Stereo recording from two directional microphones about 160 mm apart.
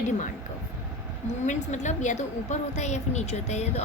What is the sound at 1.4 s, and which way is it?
A woman's voice, 50° left (ahead or behind).